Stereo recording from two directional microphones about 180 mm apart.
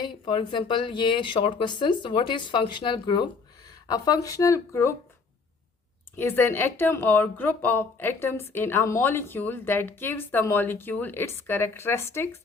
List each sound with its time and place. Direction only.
0.0 s speech: 25° left (ahead or behind)
6.1 s speech: 10° left (ahead or behind)